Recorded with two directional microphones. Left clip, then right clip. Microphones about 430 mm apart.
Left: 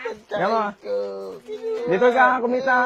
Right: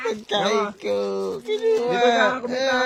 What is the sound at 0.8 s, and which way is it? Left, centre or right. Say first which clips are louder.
Speech: right 3 dB; right.